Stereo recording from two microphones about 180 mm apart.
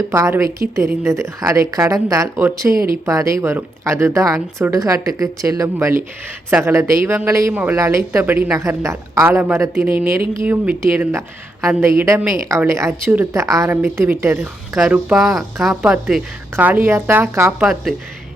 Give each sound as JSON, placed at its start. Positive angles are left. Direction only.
{"t": 0.1, "sound": "speech", "side_deg": -15}
{"t": 14.8, "sound": "speech", "side_deg": -5}